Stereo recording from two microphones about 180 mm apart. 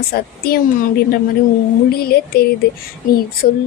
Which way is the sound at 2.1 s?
60° left (ahead or behind).